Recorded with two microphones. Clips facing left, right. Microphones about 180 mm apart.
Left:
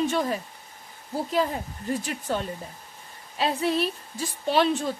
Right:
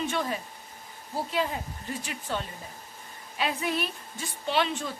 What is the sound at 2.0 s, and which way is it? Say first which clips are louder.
Speech: left 5 dB; 40° left (ahead or behind).